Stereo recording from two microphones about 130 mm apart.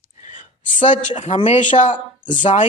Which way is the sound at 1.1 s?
55° left (ahead or behind).